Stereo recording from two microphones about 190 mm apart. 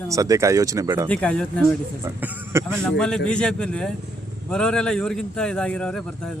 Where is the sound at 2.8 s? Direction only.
5° left (ahead or behind).